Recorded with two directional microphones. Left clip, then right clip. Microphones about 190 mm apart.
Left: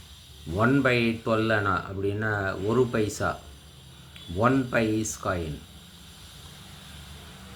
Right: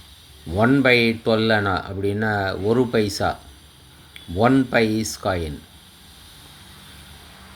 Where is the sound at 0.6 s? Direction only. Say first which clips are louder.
Right 7 dB; 30° right (ahead or behind).